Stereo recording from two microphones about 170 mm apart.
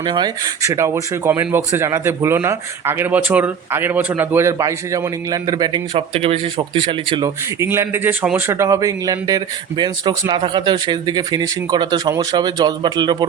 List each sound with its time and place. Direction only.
0.0 s speech: 25° right (ahead or behind)
7.6 s speech: 15° right (ahead or behind)